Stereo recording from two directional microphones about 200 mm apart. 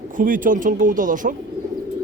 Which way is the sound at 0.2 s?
40° right (ahead or behind).